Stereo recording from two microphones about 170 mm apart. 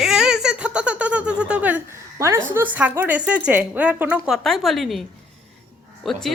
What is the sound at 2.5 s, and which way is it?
A woman's voice, 10° right (ahead or behind).